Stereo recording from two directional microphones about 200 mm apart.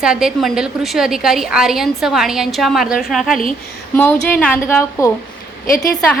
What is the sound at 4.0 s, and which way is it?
Speech, 10° left (ahead or behind).